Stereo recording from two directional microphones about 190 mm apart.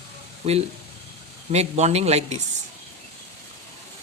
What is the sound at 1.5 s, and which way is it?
Speech, 35° right (ahead or behind).